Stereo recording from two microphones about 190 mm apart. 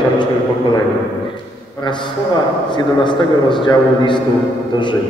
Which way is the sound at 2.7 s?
25° left (ahead or behind).